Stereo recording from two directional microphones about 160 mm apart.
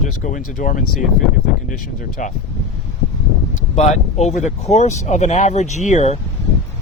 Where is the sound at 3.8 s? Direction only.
45° left (ahead or behind).